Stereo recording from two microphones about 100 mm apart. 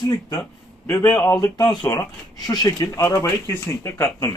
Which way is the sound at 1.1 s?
15° left (ahead or behind).